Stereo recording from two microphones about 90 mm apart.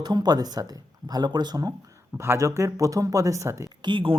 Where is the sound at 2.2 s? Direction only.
30° right (ahead or behind).